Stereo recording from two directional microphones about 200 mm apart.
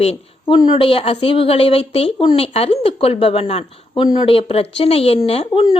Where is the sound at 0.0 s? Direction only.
30° left (ahead or behind).